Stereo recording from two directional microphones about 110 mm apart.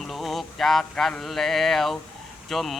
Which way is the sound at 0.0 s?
Centre (ahead or behind).